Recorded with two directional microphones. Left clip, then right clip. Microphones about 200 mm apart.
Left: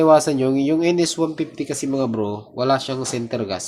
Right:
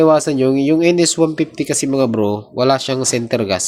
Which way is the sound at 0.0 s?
20° right (ahead or behind).